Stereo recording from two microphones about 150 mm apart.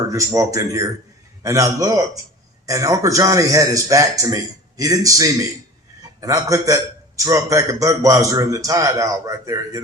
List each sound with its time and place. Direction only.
0.1 s a man's voice: 20° right (ahead or behind)